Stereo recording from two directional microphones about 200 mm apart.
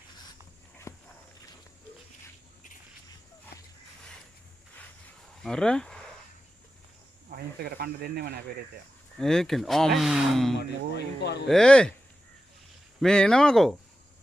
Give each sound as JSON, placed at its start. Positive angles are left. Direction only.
{"t": 0.9, "sound": "walk", "side_deg": 15}
{"t": 5.4, "sound": "speech", "side_deg": 5}
{"t": 7.3, "sound": "speech", "side_deg": -50}
{"t": 9.1, "sound": "speech", "side_deg": 0}
{"t": 10.6, "sound": "speech", "side_deg": 55}
{"t": 11.4, "sound": "speech", "side_deg": 5}
{"t": 13.0, "sound": "speech", "side_deg": 5}